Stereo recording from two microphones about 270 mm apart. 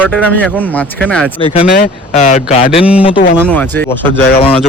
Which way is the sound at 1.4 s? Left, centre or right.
Centre.